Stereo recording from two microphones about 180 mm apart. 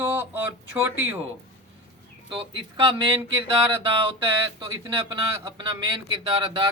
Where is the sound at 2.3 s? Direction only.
30° right (ahead or behind).